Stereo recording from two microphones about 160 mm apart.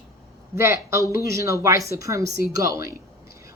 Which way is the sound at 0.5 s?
15° right (ahead or behind).